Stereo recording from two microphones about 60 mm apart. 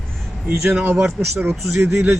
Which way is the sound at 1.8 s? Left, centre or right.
Right.